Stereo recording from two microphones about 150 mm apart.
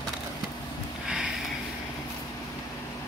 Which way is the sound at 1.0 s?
5° right (ahead or behind).